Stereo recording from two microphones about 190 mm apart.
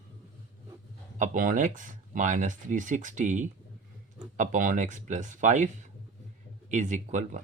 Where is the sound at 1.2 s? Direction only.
45° right (ahead or behind).